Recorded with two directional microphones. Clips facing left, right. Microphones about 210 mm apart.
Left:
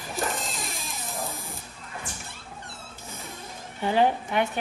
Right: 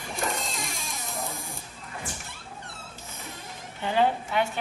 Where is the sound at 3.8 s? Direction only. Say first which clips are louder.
Left 2 dB; 15° left (ahead or behind).